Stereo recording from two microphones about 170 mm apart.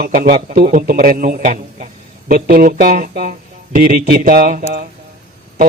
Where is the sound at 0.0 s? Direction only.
60° right (ahead or behind).